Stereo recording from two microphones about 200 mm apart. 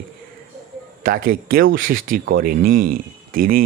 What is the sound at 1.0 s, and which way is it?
Speech, 45° right (ahead or behind).